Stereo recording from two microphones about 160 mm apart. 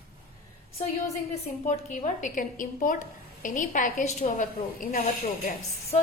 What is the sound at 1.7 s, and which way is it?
A woman's voice, 50° left (ahead or behind).